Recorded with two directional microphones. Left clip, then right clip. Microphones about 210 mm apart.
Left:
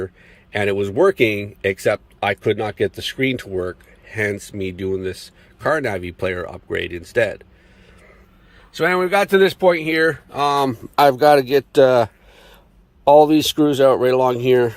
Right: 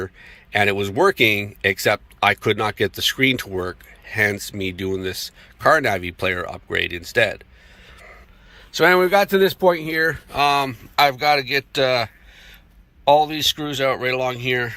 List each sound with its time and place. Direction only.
0.0 s speech: 15° left (ahead or behind)
8.5 s speech: 10° left (ahead or behind); by 10.8 s 25° left (ahead or behind)
10.9 s speech: 45° left (ahead or behind)